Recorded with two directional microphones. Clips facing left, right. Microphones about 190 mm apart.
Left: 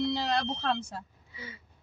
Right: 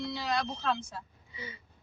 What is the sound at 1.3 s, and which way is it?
Sniff, 5° left (ahead or behind).